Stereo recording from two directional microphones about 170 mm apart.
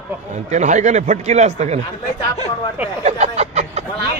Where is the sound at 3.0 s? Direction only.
40° right (ahead or behind).